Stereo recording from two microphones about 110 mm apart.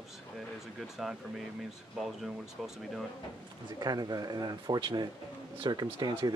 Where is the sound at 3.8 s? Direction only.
40° right (ahead or behind).